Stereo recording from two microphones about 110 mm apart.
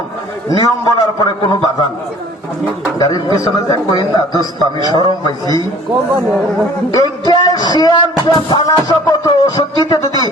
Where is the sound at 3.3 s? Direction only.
40° left (ahead or behind).